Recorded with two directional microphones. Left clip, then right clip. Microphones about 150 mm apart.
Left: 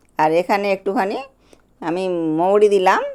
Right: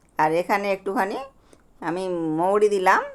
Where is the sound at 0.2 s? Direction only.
30° left (ahead or behind).